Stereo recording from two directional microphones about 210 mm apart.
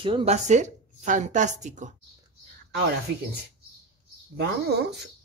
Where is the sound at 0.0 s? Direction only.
25° right (ahead or behind).